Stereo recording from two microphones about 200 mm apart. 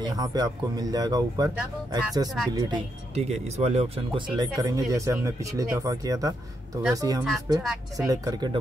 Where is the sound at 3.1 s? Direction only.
30° right (ahead or behind).